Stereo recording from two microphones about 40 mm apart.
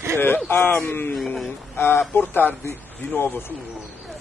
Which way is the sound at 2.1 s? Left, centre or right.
Left.